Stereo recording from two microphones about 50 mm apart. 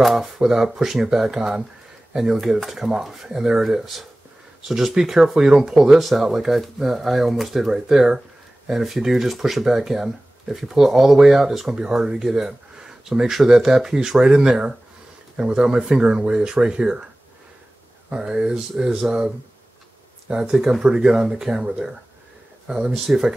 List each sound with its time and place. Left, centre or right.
0.0 s speech: centre
2.6 s speech: centre
18.2 s speech: centre
20.3 s speech: centre